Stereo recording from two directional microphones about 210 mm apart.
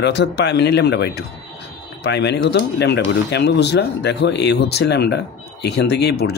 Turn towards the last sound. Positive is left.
turn(degrees=50)  # may be behind; listen again after turning